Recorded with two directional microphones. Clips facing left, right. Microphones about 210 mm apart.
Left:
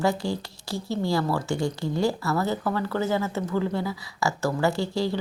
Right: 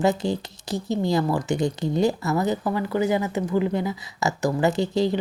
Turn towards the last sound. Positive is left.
turn(degrees=-20)  # may be behind; listen again after turning